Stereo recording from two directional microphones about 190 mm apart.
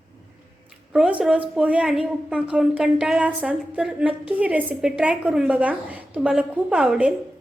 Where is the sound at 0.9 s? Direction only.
5° right (ahead or behind).